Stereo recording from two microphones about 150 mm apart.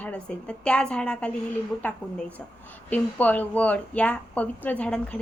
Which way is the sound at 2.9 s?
10° left (ahead or behind).